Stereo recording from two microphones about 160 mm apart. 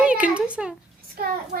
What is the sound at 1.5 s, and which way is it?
Speech, 75° right (ahead or behind).